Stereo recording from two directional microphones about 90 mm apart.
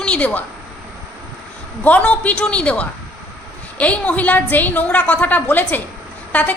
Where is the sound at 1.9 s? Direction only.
15° left (ahead or behind).